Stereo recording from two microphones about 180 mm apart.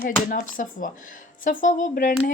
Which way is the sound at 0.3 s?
50° left (ahead or behind).